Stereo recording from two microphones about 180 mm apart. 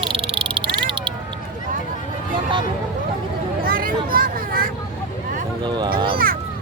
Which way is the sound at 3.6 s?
55° right (ahead or behind).